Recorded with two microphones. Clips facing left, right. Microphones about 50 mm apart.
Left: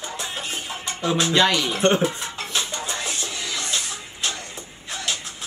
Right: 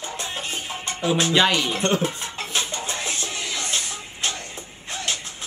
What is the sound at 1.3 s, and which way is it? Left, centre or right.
Music, centre.